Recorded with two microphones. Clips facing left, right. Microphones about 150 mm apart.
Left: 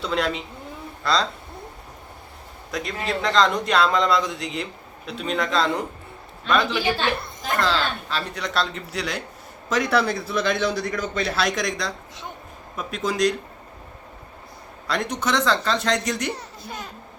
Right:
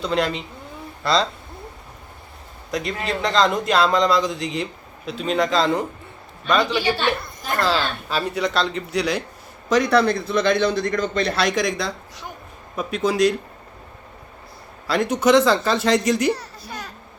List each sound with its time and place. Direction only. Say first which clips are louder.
0.0 s speech: right 2 dB; centre (ahead or behind)
2.7 s speech: right 2 dB; centre (ahead or behind)
7.6 s speech: right 2 dB; 10° right (ahead or behind)
14.8 s speech: right 7 dB; 5° right (ahead or behind)
16.3 s a sound: right 5 dB; 20° left (ahead or behind)